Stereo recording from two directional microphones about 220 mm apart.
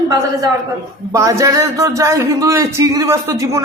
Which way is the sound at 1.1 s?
15° right (ahead or behind).